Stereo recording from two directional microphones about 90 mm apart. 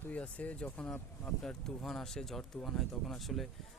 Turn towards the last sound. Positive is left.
turn(degrees=0)  # may be behind; listen again after turning